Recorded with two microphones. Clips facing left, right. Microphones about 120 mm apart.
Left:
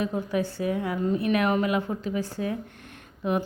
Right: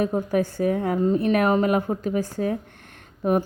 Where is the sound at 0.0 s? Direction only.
45° right (ahead or behind).